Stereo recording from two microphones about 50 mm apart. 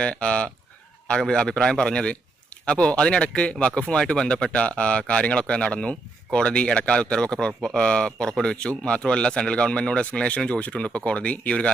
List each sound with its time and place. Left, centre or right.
0.0 s a man's voice: centre